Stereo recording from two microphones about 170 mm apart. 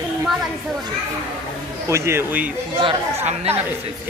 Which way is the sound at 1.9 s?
15° right (ahead or behind).